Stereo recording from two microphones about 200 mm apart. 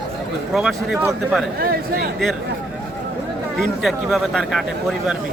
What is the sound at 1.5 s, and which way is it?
Speech, 50° right (ahead or behind).